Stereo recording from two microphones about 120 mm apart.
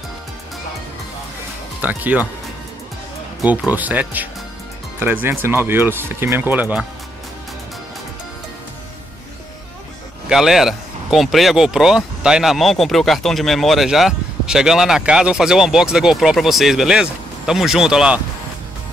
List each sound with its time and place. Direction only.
1.8 s speech: 15° right (ahead or behind)
3.4 s speech: 15° right (ahead or behind)
10.2 s speech: 5° right (ahead or behind)